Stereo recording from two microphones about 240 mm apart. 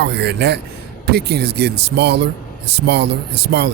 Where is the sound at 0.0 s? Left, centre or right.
Right.